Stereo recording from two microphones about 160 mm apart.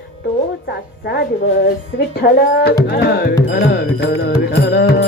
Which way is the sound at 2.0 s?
80° left.